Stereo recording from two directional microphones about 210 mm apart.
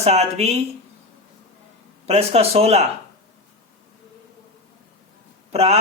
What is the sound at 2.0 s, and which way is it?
Speech, 30° right (ahead or behind).